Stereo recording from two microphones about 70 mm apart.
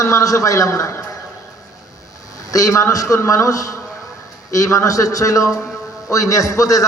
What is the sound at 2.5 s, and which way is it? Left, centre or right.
A man's voice, left.